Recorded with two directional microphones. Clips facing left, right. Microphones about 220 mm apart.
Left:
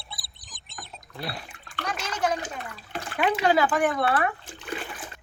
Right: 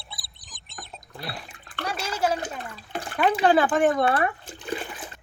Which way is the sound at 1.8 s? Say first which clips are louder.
Right 2 dB; 10° right (ahead or behind).